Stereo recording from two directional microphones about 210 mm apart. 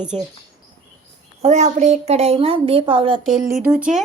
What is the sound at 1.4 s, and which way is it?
A woman's voice, 30° right (ahead or behind).